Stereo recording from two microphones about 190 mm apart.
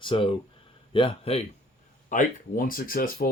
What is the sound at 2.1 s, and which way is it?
Speech, 45° left (ahead or behind).